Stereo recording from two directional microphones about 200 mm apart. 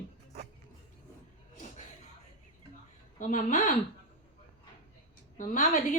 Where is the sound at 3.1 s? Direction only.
40° left (ahead or behind).